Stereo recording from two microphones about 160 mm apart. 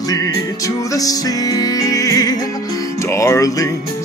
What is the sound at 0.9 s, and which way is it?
Music, 20° left (ahead or behind).